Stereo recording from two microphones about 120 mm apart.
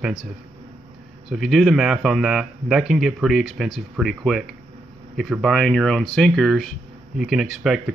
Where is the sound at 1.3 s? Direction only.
Centre (ahead or behind).